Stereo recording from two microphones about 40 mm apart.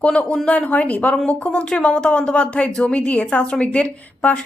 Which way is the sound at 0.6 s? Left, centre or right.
Left.